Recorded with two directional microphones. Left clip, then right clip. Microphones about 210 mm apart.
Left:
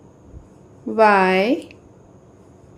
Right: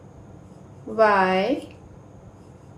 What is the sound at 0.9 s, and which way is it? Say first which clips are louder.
Speech: left 4 dB; 35° left (ahead or behind).